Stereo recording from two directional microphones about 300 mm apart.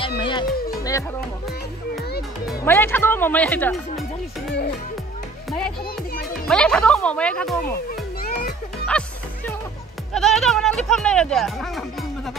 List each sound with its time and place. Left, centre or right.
0.2 s music: centre
2.4 s speech: centre
6.4 s speech: centre
7.6 s music: left
9.0 s music: centre
10.1 s speech: centre